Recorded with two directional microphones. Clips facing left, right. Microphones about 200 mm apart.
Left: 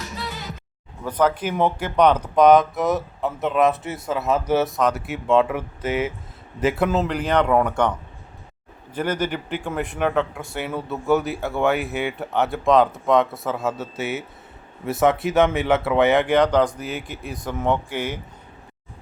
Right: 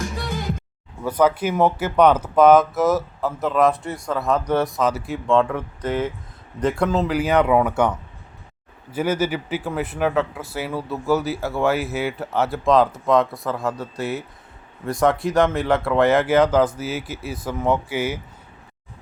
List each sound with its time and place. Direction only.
0.0 s music: 50° right (ahead or behind)
1.0 s speech: 10° right (ahead or behind)